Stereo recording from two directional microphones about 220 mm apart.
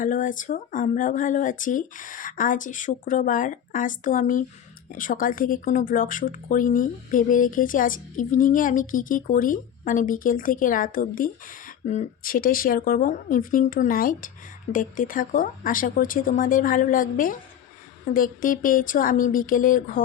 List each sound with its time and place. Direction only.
0.0 s speech: 35° left (ahead or behind)